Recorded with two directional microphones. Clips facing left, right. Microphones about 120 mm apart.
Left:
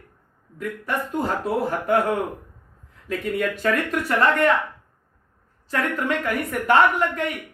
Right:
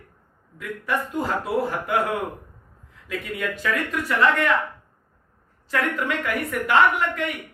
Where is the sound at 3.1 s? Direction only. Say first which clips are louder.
Left 4 dB; 45° left (ahead or behind).